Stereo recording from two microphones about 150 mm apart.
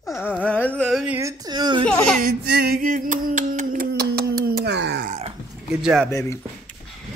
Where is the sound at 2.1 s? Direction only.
80° right.